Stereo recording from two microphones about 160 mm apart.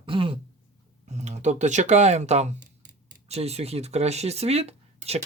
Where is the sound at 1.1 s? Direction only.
45° right (ahead or behind).